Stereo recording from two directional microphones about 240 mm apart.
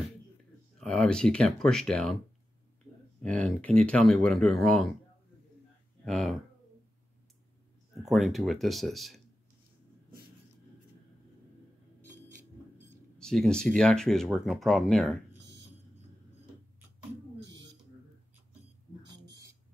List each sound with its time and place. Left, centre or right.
0.7 s speech: centre
3.2 s speech: centre
6.0 s speech: centre
8.1 s speech: centre
13.2 s speech: centre
17.4 s a sound: right
19.0 s a sound: centre